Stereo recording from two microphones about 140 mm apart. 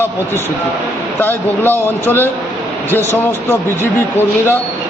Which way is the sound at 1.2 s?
15° left (ahead or behind).